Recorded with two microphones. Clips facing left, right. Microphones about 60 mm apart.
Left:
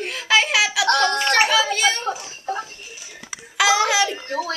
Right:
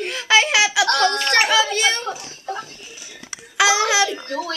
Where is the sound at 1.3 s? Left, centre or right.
Centre.